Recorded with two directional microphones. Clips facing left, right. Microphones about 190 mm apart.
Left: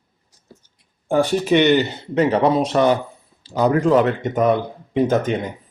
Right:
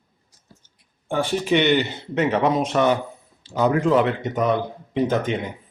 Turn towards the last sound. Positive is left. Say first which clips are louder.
# left 3 dB
turn(degrees=45)  # may be behind; listen again after turning